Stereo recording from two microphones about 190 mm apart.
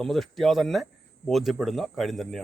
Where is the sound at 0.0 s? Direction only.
Centre (ahead or behind).